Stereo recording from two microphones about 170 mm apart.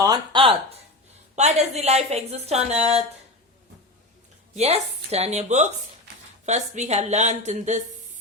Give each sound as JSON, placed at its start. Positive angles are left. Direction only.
{"t": 0.0, "sound": "a woman's voice", "side_deg": -25}
{"t": 4.5, "sound": "a woman's voice", "side_deg": -40}